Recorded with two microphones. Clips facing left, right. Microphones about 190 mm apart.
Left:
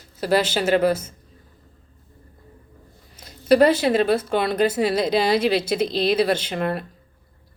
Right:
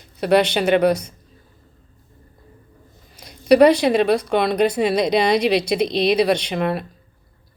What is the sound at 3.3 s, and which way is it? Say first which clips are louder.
A woman's voice: right 3 dB; 65° right (ahead or behind).